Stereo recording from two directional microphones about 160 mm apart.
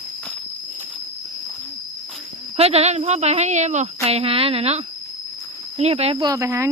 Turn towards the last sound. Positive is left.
turn(degrees=-20)  # may be behind; listen again after turning